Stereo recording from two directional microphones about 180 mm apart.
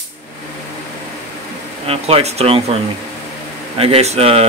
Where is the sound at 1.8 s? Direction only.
35° right (ahead or behind).